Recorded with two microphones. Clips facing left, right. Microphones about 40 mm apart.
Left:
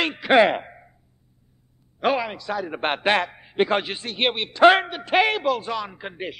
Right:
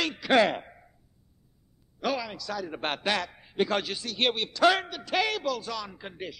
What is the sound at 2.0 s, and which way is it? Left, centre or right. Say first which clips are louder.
A man's voice: left 8 dB; left.